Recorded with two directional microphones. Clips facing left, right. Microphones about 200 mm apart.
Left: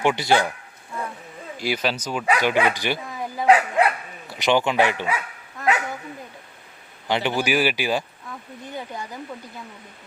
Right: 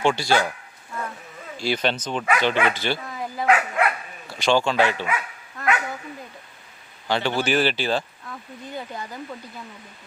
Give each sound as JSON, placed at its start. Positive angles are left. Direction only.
{"t": 0.0, "sound": "speech", "side_deg": 20}
{"t": 1.5, "sound": "speech", "side_deg": 10}
{"t": 3.4, "sound": "dog", "side_deg": 30}
{"t": 4.3, "sound": "speech", "side_deg": 20}
{"t": 7.1, "sound": "speech", "side_deg": 20}